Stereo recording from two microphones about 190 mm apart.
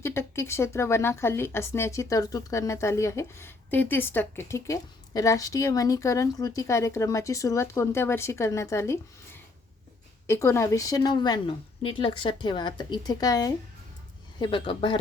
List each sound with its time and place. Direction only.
0.0 s a woman's voice: 15° left (ahead or behind)